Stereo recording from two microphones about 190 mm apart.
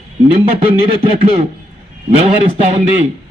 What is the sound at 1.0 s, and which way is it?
A man's voice, 30° right (ahead or behind).